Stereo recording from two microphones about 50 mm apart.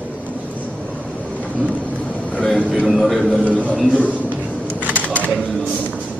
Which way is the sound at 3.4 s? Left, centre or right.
Left.